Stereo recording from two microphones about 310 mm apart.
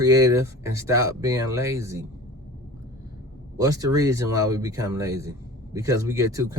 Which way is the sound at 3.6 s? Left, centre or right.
Centre.